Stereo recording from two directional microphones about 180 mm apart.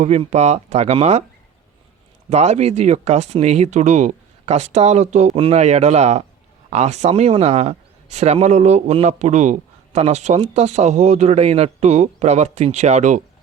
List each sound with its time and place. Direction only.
0.0 s a man's voice: 40° right (ahead or behind)
2.3 s a man's voice: 40° right (ahead or behind)